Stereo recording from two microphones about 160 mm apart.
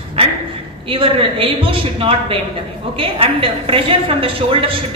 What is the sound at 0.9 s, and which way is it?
A woman's voice, 35° right (ahead or behind).